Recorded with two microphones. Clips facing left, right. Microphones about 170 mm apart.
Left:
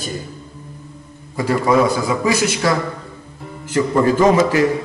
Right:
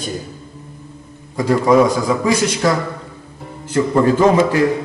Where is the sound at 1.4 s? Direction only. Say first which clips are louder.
Right 3 dB; 5° left (ahead or behind).